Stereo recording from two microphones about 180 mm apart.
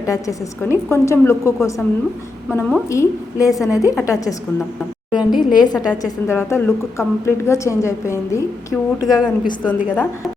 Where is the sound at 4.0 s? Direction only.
20° left (ahead or behind).